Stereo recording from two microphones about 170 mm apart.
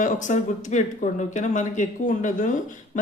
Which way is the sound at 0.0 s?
45° left (ahead or behind).